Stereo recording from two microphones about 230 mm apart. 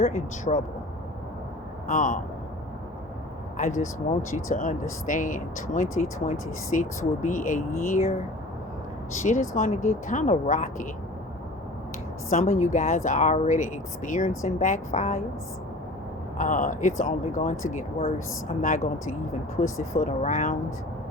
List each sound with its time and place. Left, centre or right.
0.0 s speech: left
1.9 s speech: left
3.6 s speech: left
9.2 s speech: left
12.3 s speech: left
16.4 s speech: left